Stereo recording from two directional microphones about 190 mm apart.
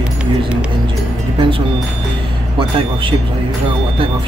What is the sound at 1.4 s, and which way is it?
Music, 25° right (ahead or behind).